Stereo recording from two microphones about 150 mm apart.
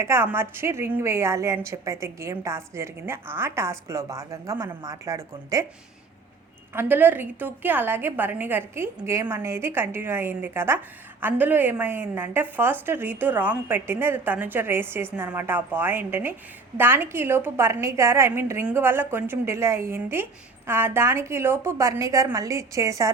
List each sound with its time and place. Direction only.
0.0 s a woman's voice: 15° right (ahead or behind)
6.7 s a woman's voice: 15° right (ahead or behind)